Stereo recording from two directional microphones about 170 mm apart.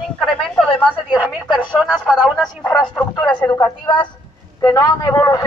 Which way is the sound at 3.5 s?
25° left (ahead or behind).